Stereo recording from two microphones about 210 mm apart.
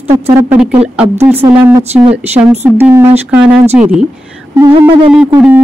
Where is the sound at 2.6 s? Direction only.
10° right (ahead or behind).